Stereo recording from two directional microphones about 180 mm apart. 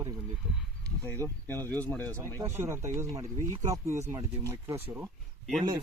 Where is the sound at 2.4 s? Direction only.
15° right (ahead or behind).